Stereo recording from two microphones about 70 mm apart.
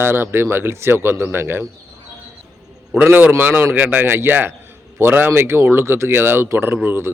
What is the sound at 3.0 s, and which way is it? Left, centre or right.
A man's voice, right.